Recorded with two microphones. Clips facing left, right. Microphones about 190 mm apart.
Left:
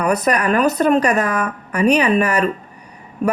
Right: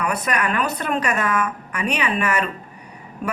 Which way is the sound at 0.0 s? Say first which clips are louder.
Left 6 dB; 40° left (ahead or behind).